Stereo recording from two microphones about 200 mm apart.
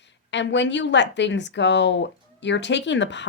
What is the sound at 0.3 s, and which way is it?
Speech, 65° left (ahead or behind).